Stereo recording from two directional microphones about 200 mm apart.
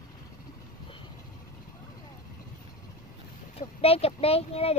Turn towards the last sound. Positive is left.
turn(degrees=30)  # may be behind; listen again after turning